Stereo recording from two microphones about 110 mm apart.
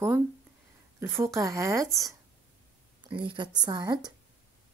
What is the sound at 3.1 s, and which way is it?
A woman's voice, 50° right (ahead or behind).